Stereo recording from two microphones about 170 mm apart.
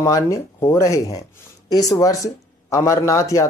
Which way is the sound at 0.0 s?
20° left (ahead or behind).